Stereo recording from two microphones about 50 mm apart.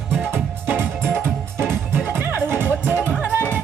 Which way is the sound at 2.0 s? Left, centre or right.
Right.